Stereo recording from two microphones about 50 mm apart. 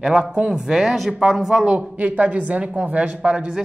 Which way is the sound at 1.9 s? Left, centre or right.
Right.